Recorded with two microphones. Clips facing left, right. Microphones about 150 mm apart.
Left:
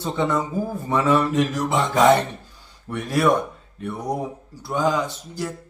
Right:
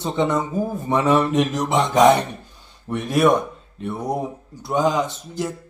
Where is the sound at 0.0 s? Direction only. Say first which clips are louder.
Right 2 dB; 20° right (ahead or behind).